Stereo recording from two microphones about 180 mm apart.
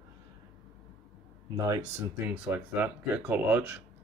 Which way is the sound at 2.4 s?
10° right (ahead or behind).